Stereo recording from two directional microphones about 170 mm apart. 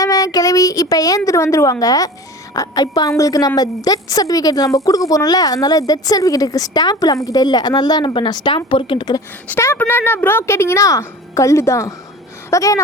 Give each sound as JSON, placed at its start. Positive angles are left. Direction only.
{"t": 0.0, "sound": "a woman's voice", "side_deg": 20}
{"t": 9.5, "sound": "a woman's voice", "side_deg": 10}